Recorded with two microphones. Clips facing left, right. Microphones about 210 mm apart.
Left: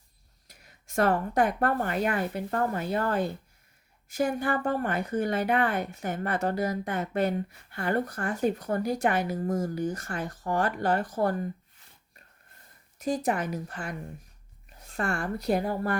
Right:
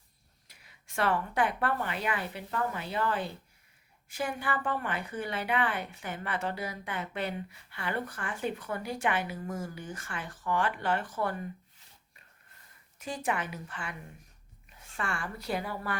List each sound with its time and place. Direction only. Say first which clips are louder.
0.4 s a woman's voice: left 5 dB; 45° left (ahead or behind)
13.0 s a woman's voice: left 6 dB; 40° left (ahead or behind)